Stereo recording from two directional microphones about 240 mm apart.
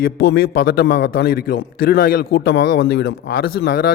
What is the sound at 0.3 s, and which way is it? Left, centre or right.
A man's voice, left.